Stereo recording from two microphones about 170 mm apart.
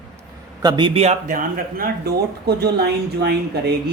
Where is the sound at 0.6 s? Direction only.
25° right (ahead or behind).